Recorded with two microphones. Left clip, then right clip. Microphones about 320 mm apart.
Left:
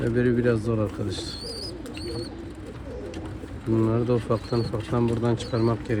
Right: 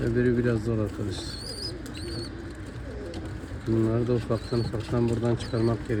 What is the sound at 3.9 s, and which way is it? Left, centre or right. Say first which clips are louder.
Speech: left 3 dB; left.